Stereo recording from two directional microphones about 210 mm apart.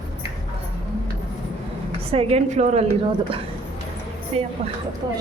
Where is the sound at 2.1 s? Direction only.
30° right (ahead or behind).